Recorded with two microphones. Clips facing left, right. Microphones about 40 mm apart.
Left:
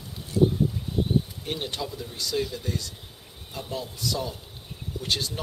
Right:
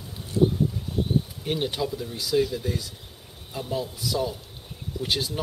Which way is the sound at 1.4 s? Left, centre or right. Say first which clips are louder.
Right 5 dB; centre.